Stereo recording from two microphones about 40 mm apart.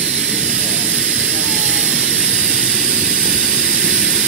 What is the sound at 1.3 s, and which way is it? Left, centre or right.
Vehicle, centre.